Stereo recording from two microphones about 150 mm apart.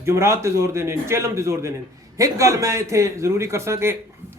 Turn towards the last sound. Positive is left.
turn(degrees=-15)  # may be behind; listen again after turning